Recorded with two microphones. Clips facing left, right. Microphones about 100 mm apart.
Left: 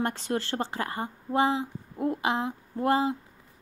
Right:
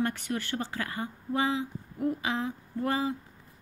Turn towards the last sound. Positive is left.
turn(degrees=25)  # may be behind; listen again after turning